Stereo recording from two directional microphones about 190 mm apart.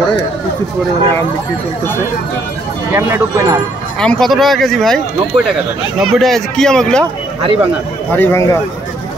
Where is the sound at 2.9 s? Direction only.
15° right (ahead or behind).